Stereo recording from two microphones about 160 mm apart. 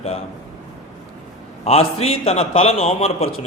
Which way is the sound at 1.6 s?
40° left (ahead or behind).